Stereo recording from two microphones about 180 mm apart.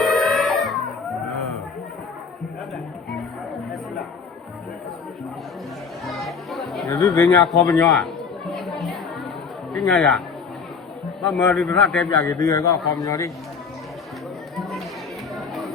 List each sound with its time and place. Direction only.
0.0 s music: centre (ahead or behind)
2.7 s music: centre (ahead or behind)
6.1 s music: centre (ahead or behind)
6.8 s speech: 20° left (ahead or behind)
7.4 s a man's voice: centre (ahead or behind)
7.8 s chatter: centre (ahead or behind)
9.7 s a man's voice: centre (ahead or behind)
12.0 s a man's voice: 15° left (ahead or behind)
14.5 s chatter: centre (ahead or behind)
15.4 s music: centre (ahead or behind)